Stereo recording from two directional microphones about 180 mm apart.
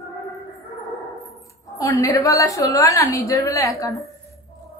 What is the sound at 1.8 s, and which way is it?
A woman's voice, 15° left (ahead or behind).